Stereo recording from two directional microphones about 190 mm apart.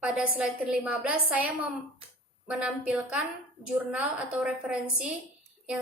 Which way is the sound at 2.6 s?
5° right (ahead or behind).